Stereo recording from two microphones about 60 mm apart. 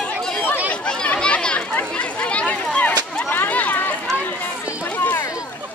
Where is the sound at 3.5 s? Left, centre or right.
Left.